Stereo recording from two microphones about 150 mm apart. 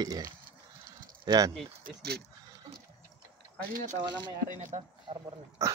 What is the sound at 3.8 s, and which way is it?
Speech, 55° right (ahead or behind).